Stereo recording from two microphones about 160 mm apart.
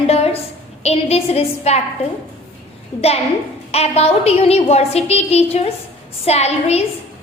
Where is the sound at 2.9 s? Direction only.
30° left (ahead or behind).